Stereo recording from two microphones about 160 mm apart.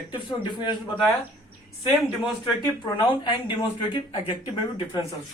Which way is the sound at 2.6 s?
25° left (ahead or behind).